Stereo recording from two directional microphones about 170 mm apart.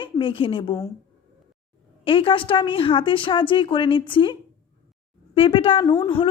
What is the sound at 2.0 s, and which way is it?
A woman's voice, 30° left (ahead or behind).